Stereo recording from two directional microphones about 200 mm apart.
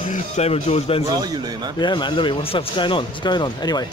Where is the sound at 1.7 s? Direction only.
25° left (ahead or behind).